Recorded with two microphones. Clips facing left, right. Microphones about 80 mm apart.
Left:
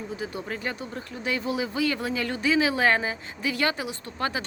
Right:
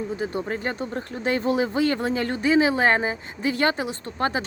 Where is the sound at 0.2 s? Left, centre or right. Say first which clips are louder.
Right 5 dB; right.